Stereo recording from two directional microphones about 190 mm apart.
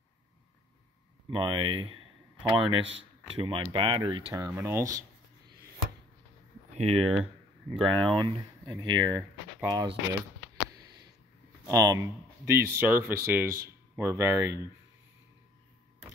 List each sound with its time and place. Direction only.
1.3 s speech: 25° right (ahead or behind)
4.3 s speech: 15° right (ahead or behind)
6.7 s speech: 35° right (ahead or behind)
7.8 s speech: 5° left (ahead or behind)
8.2 s speech: 25° right (ahead or behind)
11.6 s speech: 20° right (ahead or behind)